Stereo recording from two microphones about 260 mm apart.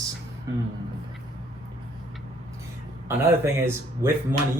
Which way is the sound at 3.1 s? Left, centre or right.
Centre.